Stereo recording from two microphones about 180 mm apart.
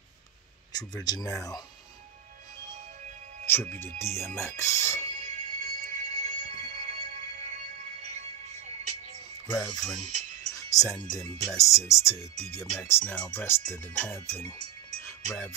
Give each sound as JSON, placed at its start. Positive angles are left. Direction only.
{"t": 0.7, "sound": "speech", "side_deg": 20}
{"t": 3.5, "sound": "music", "side_deg": 10}
{"t": 4.0, "sound": "speech", "side_deg": 15}
{"t": 5.0, "sound": "music", "side_deg": -35}
{"t": 9.5, "sound": "speech", "side_deg": 20}
{"t": 15.0, "sound": "music", "side_deg": 10}